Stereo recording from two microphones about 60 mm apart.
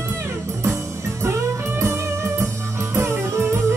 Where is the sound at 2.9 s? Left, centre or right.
Right.